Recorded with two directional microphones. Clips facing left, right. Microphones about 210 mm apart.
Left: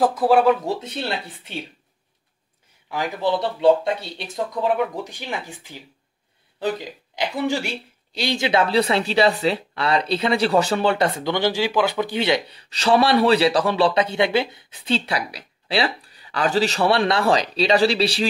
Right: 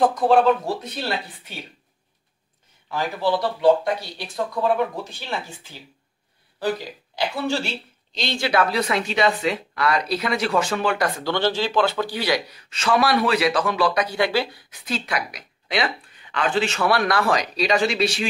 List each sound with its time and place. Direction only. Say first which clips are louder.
0.0 s speech: even; 5° left (ahead or behind)
0.7 s speech: left 1 dB; 25° left (ahead or behind)
2.9 s speech: even; 20° left (ahead or behind)
11.3 s speech: right 1 dB; 10° left (ahead or behind); by 18.3 s 35° left (ahead or behind)